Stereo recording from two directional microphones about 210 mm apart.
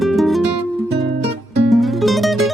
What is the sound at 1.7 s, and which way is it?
Music, centre (ahead or behind).